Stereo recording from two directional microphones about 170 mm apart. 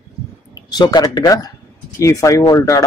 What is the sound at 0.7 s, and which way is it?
Speech, 25° left (ahead or behind).